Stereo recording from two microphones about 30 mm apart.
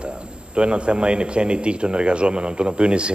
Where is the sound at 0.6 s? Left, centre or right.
Right.